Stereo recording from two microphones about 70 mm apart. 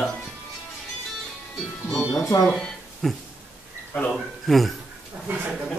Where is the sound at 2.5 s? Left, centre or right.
Centre.